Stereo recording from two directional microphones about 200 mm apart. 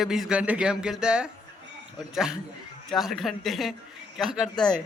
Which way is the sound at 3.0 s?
Centre (ahead or behind).